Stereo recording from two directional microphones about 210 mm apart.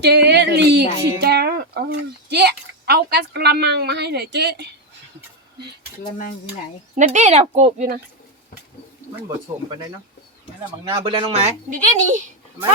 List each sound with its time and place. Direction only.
0.0 s speech: 55° right (ahead or behind)
1.2 s a sound: 50° right (ahead or behind)
2.3 s speech: 50° right (ahead or behind)
6.9 s speech: 35° right (ahead or behind)
10.8 s speech: 25° right (ahead or behind)